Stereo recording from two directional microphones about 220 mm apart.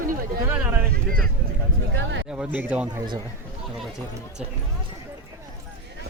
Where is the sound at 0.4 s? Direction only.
10° right (ahead or behind).